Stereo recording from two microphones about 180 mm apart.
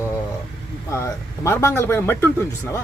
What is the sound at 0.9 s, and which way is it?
Speech, 15° left (ahead or behind).